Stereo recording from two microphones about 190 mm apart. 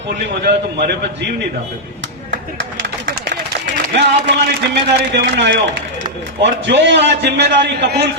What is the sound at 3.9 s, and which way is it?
A man's voice, 65° right (ahead or behind).